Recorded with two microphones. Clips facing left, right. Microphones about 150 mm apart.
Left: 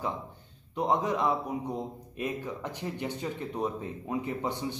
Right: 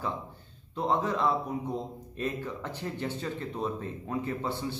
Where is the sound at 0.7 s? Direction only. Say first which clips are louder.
Left 1 dB; 15° left (ahead or behind).